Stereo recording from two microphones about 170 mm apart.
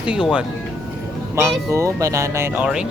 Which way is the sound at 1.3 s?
15° right (ahead or behind).